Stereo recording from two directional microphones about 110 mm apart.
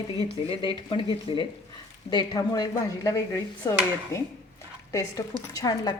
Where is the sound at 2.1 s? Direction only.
40° left (ahead or behind).